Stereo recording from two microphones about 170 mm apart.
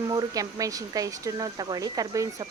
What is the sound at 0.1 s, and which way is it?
Speech, 20° right (ahead or behind).